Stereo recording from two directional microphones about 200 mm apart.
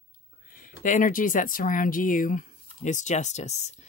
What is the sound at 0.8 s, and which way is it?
Speech, 40° left (ahead or behind).